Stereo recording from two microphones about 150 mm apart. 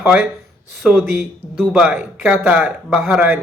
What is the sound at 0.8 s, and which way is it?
Speech, centre (ahead or behind).